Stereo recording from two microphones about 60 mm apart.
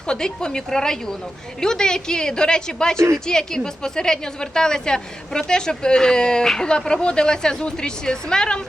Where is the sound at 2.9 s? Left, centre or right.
Right.